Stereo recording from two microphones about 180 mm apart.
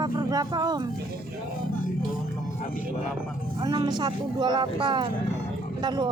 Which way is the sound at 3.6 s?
25° right (ahead or behind).